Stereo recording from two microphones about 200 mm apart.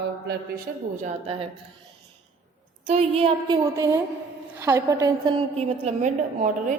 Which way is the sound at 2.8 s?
30° right (ahead or behind).